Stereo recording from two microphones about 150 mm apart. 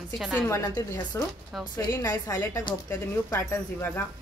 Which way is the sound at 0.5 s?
20° left (ahead or behind).